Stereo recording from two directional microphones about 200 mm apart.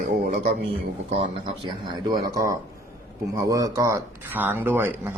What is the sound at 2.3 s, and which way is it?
Speech, 15° right (ahead or behind).